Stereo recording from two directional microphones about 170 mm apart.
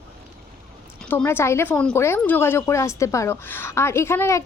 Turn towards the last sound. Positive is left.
turn(degrees=15)  # may be behind; listen again after turning